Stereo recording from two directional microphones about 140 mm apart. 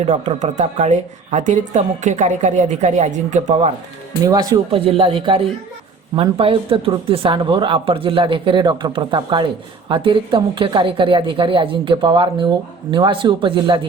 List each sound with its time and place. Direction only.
0.3 s a woman's voice: 60° right (ahead or behind)
4.3 s speech: 25° right (ahead or behind)
4.7 s a woman's voice: 40° right (ahead or behind)